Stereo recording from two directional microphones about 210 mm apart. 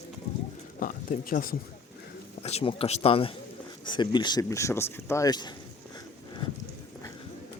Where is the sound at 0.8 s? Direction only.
40° left (ahead or behind).